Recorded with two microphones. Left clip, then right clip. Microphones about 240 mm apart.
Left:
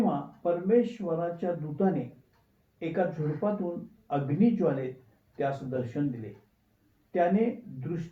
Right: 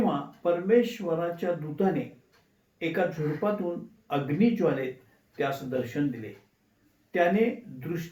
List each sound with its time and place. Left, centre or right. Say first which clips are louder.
0.4 s speech: right 2 dB; right